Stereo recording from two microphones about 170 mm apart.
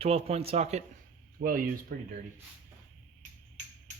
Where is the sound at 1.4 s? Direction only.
60° right (ahead or behind).